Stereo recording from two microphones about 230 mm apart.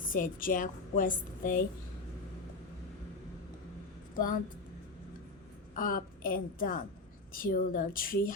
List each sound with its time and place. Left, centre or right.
0.0 s a woman's voice: left
4.1 s speech: left
5.7 s a woman's voice: left